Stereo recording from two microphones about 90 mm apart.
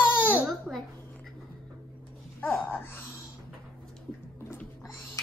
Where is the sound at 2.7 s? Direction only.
25° left (ahead or behind).